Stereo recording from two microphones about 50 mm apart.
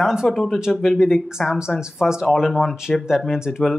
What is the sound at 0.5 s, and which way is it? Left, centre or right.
Speech, centre.